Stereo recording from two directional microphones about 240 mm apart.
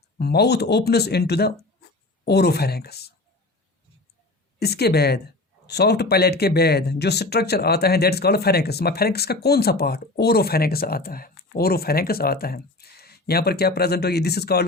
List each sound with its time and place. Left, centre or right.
0.2 s speech: left
4.6 s speech: left